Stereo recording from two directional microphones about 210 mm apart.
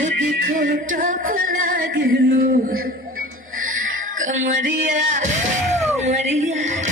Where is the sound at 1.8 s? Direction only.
55° right (ahead or behind).